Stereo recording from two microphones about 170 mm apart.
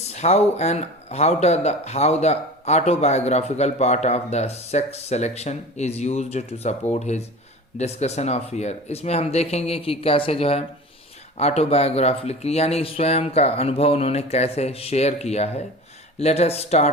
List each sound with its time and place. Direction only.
0.1 s speech: 40° left (ahead or behind)